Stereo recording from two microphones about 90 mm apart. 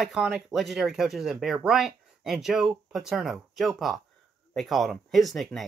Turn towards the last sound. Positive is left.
turn(degrees=0)  # may be behind; listen again after turning